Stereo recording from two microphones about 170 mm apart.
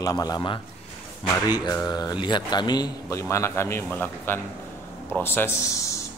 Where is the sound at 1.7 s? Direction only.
20° left (ahead or behind).